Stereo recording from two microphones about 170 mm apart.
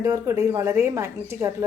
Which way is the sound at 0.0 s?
20° right (ahead or behind).